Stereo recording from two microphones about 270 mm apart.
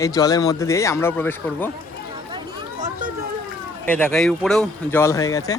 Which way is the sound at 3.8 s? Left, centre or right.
Centre.